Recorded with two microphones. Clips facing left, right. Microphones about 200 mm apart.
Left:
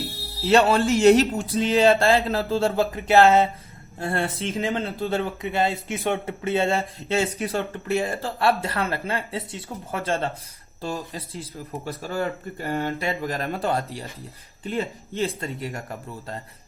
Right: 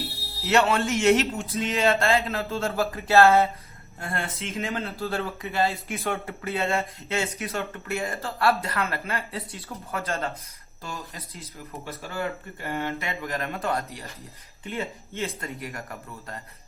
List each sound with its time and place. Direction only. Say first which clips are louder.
0.4 s speech: left 4 dB; 30° left (ahead or behind)
2.9 s speech: even; 20° left (ahead or behind)
4.0 s speech: left 6 dB; 30° left (ahead or behind)